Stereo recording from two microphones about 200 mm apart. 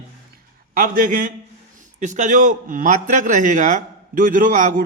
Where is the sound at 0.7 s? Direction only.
45° right (ahead or behind).